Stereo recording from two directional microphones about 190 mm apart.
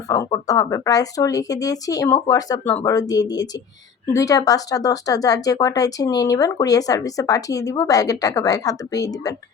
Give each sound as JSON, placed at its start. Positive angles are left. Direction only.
{"t": 0.1, "sound": "a woman's voice", "side_deg": 20}